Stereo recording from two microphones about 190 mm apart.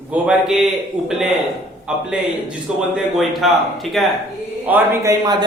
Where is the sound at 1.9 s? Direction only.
5° right (ahead or behind).